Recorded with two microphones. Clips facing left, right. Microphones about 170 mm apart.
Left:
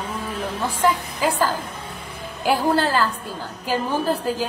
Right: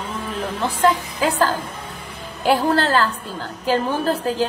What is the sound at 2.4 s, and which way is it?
A woman's voice, 10° left (ahead or behind).